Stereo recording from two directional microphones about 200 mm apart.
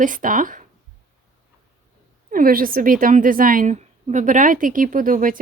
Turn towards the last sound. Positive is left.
turn(degrees=-45)  # may be behind; listen again after turning